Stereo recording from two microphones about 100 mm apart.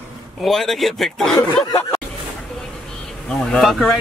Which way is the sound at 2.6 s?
5° left (ahead or behind).